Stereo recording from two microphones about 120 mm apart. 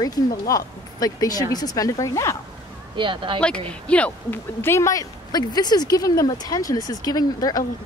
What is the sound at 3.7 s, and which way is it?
Speech, 10° left (ahead or behind).